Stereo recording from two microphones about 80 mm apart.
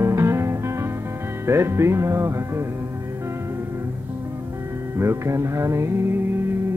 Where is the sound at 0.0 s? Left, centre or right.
Right.